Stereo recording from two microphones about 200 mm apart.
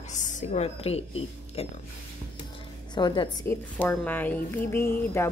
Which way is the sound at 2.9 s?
20° left (ahead or behind).